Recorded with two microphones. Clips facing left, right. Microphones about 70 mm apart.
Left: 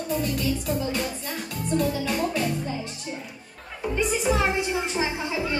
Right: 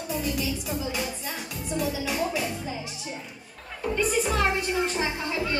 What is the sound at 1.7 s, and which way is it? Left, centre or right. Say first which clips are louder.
Music: left 3 dB; centre.